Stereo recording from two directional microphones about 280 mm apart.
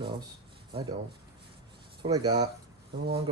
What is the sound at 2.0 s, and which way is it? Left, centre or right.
Speech, centre.